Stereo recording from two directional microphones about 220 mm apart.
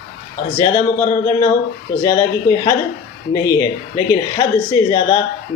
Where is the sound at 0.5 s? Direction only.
15° left (ahead or behind).